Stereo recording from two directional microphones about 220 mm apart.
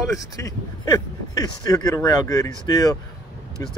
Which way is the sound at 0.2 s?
15° left (ahead or behind).